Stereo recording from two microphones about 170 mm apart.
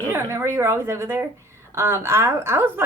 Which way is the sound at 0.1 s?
15° right (ahead or behind).